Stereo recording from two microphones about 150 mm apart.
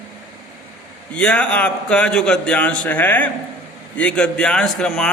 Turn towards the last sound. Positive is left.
turn(degrees=5)  # may be behind; listen again after turning